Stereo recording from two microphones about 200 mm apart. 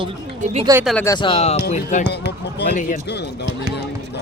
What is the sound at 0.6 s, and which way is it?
Speech, 15° right (ahead or behind).